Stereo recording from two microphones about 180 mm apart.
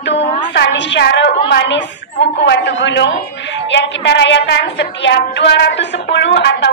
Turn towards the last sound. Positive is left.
turn(degrees=70)  # may be behind; listen again after turning